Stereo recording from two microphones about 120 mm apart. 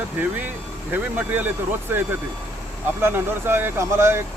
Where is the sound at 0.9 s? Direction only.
15° right (ahead or behind).